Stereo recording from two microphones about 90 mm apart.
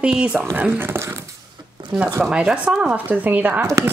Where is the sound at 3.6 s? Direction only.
35° right (ahead or behind).